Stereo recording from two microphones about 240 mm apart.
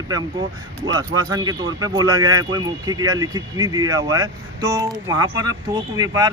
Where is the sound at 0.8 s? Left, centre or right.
Centre.